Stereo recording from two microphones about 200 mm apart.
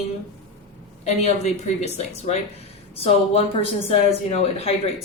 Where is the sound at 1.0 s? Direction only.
35° left (ahead or behind).